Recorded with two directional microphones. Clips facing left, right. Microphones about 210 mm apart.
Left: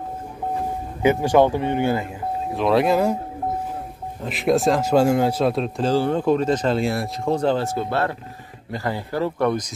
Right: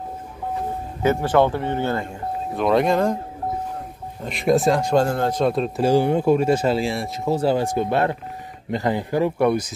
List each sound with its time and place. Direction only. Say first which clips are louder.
1.0 s a man's voice: left 2 dB; 15° left (ahead or behind)
2.5 s speech: even; centre (ahead or behind)
4.2 s speech: right 1 dB; centre (ahead or behind)
5.8 s speech: right 4 dB; 10° right (ahead or behind)